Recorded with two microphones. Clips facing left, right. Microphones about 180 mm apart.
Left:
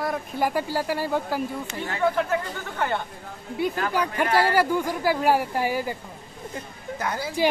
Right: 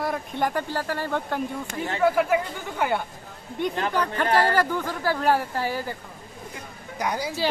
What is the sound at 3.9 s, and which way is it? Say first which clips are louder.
Speech: even; 10° left (ahead or behind).